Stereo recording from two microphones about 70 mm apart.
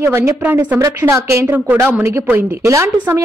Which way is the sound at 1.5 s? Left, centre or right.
Right.